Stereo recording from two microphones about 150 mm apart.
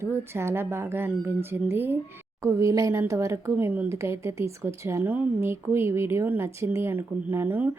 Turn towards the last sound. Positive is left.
turn(degrees=-15)  # may be behind; listen again after turning